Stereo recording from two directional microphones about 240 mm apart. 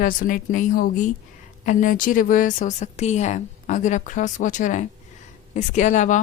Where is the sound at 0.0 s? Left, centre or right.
Left.